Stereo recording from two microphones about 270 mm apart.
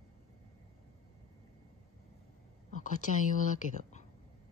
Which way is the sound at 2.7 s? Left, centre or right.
Left.